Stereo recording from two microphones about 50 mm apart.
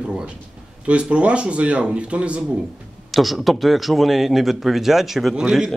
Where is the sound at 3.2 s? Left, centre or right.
Centre.